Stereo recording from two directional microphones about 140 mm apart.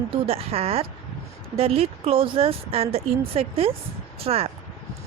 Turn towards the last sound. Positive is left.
turn(degrees=-45)  # may be behind; listen again after turning